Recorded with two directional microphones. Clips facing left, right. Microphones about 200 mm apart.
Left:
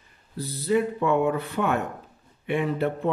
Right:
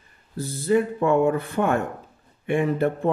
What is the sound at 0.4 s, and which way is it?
Speech, 45° right (ahead or behind).